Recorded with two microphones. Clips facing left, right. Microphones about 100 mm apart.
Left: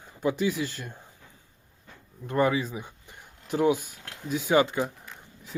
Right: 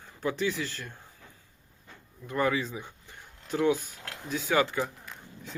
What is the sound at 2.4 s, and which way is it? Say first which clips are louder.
Speech: left 3 dB; 15° left (ahead or behind).